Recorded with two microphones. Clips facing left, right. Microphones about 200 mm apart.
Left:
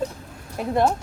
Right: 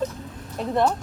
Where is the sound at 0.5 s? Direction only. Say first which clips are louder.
Left 1 dB; 10° left (ahead or behind).